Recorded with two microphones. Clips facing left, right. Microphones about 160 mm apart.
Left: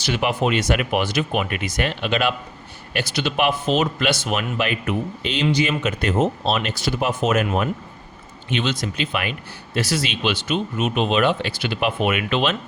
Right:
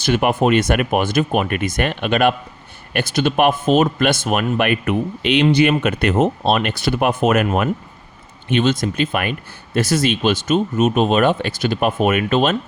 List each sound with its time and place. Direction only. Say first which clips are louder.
0.0 s speech: right 5 dB; 50° right (ahead or behind)
8.4 s speech: right 7 dB; 50° right (ahead or behind)